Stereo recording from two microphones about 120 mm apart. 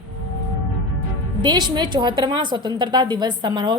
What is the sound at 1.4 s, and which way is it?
A woman's voice, 35° right (ahead or behind).